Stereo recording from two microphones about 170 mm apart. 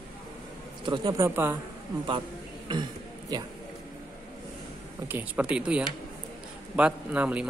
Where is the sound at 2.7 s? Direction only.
25° right (ahead or behind).